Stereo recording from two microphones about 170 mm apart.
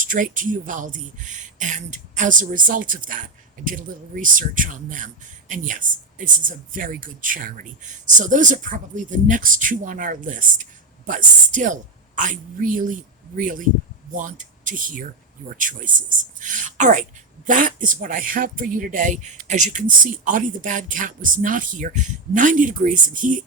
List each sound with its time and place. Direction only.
0.0 s speech: 50° right (ahead or behind)